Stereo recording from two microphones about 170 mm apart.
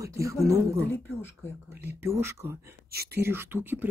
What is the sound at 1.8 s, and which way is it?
Speech, 15° right (ahead or behind).